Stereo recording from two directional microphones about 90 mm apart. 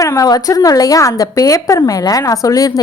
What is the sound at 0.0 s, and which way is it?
A woman's voice, 40° left (ahead or behind).